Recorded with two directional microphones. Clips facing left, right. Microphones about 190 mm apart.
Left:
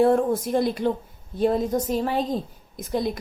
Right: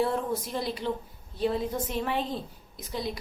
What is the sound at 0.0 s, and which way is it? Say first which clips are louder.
A woman's voice: left 9 dB; 50° left (ahead or behind).